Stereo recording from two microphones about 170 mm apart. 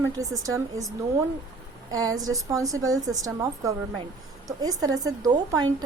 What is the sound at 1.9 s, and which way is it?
A woman's voice, 20° right (ahead or behind).